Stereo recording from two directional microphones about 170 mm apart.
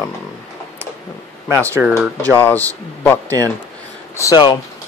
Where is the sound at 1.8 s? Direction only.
5° right (ahead or behind).